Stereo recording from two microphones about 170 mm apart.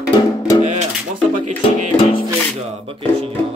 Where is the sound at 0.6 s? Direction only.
45° right (ahead or behind).